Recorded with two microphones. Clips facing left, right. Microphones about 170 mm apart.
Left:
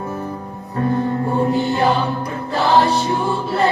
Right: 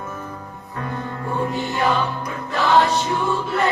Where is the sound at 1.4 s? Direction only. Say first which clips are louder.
Left 4 dB; 30° left (ahead or behind).